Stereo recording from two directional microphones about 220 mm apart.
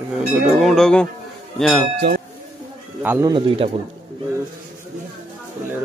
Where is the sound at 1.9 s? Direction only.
45° right (ahead or behind).